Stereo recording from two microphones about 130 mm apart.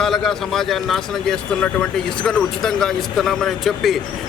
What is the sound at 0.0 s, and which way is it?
A man's voice, 5° left (ahead or behind).